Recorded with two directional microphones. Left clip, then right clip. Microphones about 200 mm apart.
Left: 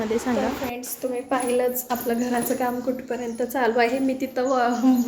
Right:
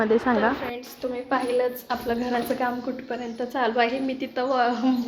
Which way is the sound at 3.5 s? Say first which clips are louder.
Left 2 dB; 10° left (ahead or behind).